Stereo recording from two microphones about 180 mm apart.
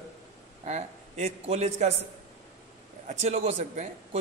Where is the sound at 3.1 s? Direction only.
40° right (ahead or behind).